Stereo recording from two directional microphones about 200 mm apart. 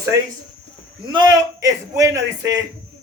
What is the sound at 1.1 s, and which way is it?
A man's voice, 20° right (ahead or behind).